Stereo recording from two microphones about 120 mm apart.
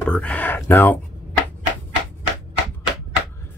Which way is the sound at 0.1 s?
10° left (ahead or behind).